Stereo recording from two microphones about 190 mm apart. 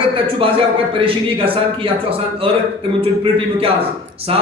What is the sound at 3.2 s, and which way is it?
Speech, 30° right (ahead or behind).